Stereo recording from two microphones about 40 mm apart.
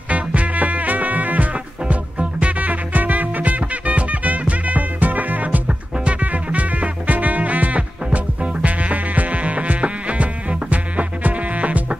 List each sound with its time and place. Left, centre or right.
0.1 s music: right
5.7 s music: right